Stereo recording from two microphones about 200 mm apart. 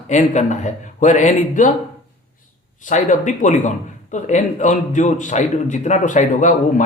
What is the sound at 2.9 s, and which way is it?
A man's voice, 40° left (ahead or behind).